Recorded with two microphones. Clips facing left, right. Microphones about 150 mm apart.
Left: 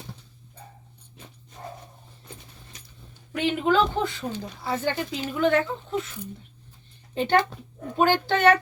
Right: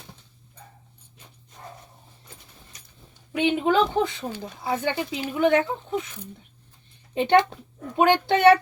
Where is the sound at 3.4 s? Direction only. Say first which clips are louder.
Right 1 dB; 20° right (ahead or behind).